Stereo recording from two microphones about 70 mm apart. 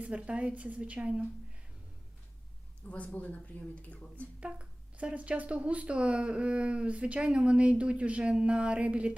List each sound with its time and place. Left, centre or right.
0.0 s a woman's voice: centre
2.8 s speech: left
4.4 s speech: centre